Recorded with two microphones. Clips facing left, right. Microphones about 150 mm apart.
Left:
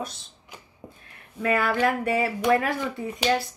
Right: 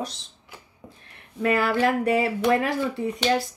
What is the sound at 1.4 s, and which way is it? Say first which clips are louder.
Speech: right 1 dB; 30° right (ahead or behind).